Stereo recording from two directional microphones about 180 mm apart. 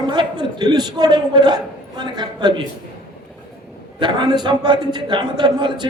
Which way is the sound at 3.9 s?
25° right (ahead or behind).